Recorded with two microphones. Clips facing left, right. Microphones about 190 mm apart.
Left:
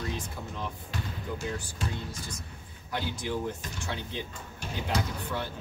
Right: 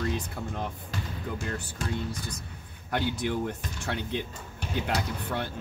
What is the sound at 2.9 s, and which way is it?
Speech, 60° right (ahead or behind).